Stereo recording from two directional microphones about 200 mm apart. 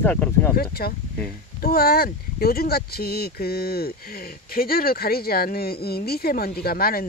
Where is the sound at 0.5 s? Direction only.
50° left (ahead or behind).